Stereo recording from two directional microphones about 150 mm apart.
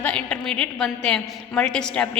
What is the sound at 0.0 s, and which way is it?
A woman's voice, 5° left (ahead or behind).